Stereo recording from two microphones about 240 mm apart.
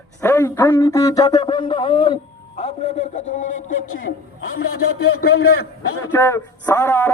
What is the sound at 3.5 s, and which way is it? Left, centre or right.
Speech, left.